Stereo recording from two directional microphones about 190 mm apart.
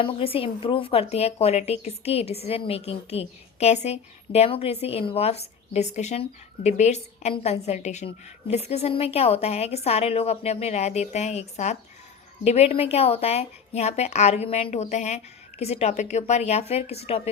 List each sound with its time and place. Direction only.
0.0 s a woman's voice: 30° left (ahead or behind)